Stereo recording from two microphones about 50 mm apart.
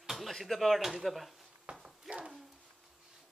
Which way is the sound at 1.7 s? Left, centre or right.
Right.